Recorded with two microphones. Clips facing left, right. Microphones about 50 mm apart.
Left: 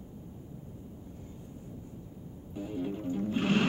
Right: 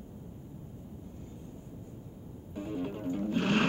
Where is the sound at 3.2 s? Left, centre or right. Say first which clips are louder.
Even; centre.